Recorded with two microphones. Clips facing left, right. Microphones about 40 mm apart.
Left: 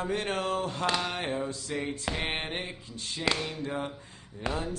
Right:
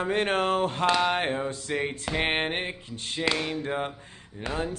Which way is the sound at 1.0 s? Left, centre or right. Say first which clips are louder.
Right 6 dB; right.